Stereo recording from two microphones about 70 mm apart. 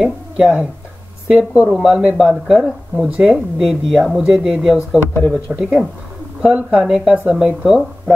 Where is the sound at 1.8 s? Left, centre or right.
Centre.